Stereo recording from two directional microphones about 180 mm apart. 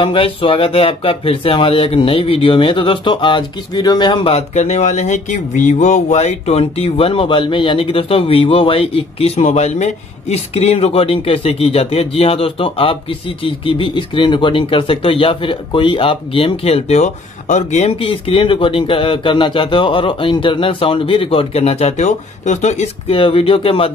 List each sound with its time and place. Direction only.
0.0 s speech: 30° left (ahead or behind)